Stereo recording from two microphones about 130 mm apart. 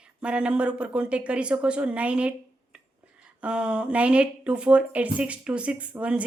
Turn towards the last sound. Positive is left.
turn(degrees=-10)  # may be behind; listen again after turning